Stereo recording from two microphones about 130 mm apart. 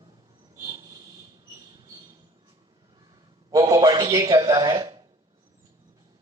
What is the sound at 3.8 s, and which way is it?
A man's voice, 25° right (ahead or behind).